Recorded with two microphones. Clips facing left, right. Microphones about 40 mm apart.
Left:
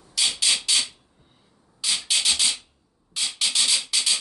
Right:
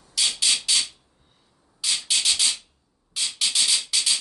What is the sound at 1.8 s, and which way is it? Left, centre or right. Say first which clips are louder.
Rub: even; centre.